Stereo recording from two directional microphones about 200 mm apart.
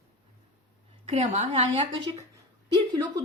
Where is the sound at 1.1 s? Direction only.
35° right (ahead or behind).